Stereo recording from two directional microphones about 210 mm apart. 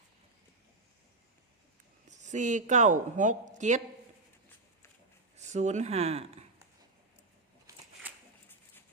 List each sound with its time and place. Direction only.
2.0 s speech: 35° right (ahead or behind)
5.4 s speech: 35° right (ahead or behind)